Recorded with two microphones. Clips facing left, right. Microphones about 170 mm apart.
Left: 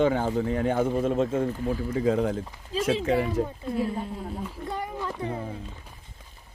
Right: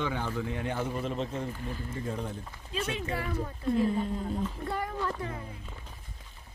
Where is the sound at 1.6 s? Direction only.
90° left.